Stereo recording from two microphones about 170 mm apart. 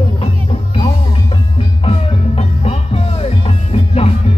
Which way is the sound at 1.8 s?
35° left (ahead or behind).